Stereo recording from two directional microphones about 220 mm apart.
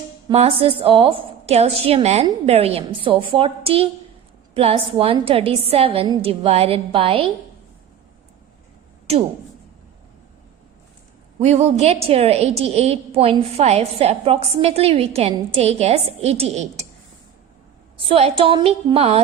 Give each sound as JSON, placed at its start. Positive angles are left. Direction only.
{"t": 0.3, "sound": "a woman's voice", "side_deg": -25}
{"t": 11.3, "sound": "a woman's voice", "side_deg": -30}
{"t": 17.9, "sound": "a woman's voice", "side_deg": -25}